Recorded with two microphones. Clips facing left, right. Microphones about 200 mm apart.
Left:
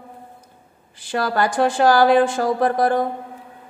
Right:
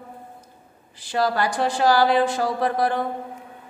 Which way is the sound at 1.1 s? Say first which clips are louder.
Left 1 dB; 55° left (ahead or behind).